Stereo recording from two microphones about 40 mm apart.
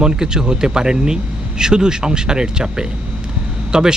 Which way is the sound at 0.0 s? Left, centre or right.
Centre.